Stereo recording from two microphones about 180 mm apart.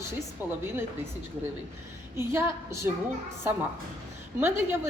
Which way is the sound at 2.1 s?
15° right (ahead or behind).